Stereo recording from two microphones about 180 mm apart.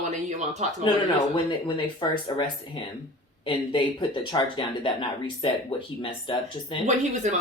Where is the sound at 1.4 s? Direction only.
25° left (ahead or behind).